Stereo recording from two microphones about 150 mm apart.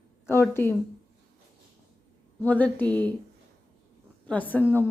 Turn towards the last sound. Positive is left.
turn(degrees=10)  # may be behind; listen again after turning